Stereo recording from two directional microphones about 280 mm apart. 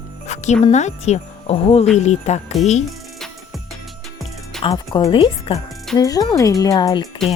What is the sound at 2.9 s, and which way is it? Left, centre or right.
Music, centre.